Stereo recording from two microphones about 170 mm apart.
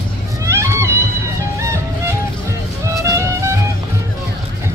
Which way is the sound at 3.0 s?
15° right (ahead or behind).